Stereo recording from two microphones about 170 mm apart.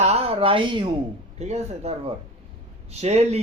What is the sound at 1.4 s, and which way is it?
A man's voice, 40° right (ahead or behind).